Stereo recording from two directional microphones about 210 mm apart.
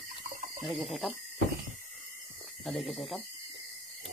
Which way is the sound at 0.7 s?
Centre (ahead or behind).